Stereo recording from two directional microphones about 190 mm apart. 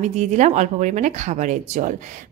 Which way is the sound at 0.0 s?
35° right (ahead or behind).